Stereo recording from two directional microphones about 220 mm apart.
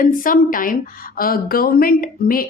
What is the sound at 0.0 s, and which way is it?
A woman's voice, 40° left (ahead or behind).